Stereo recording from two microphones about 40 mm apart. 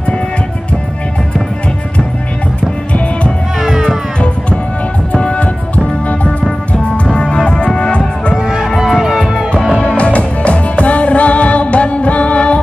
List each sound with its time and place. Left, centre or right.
5.1 s music: left
7.2 s music: centre
8.4 s music: centre
8.6 s music: centre
9.8 s music: left